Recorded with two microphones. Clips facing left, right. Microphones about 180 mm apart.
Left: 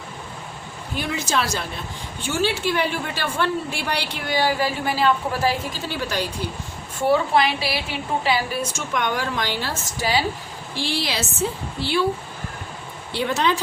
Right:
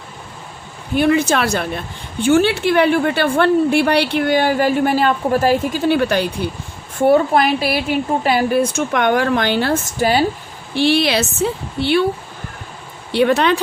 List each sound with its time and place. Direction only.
0.9 s a woman's voice: 60° right (ahead or behind)
7.1 s a woman's voice: 50° right (ahead or behind)
10.8 s a woman's voice: 65° right (ahead or behind)
13.1 s a woman's voice: 65° right (ahead or behind)